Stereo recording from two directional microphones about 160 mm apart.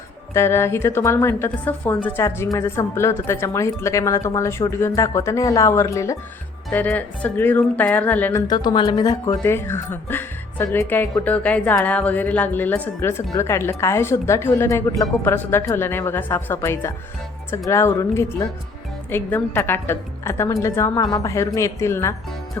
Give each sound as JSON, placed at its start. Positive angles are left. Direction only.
{"t": 0.3, "sound": "speech", "side_deg": 15}